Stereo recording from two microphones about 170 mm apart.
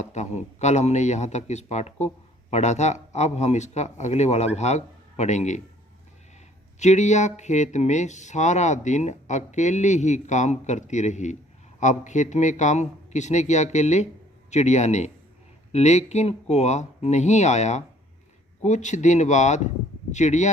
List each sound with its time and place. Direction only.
0.0 s speech: 45° left (ahead or behind)
6.7 s speech: 45° left (ahead or behind)